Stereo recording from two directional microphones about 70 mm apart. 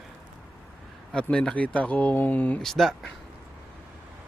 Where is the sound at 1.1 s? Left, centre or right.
Centre.